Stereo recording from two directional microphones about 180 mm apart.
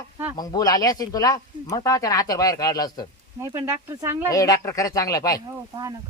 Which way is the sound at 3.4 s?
15° right (ahead or behind).